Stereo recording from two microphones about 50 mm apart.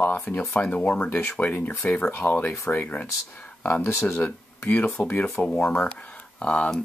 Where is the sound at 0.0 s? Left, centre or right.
Left.